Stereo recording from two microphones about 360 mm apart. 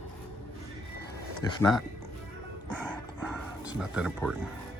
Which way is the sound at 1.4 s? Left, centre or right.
Centre.